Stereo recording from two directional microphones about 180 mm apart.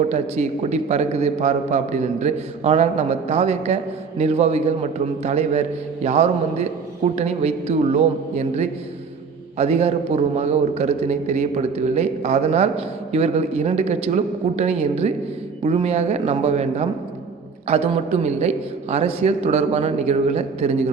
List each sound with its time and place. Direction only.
0.1 s a man's voice: 40° right (ahead or behind)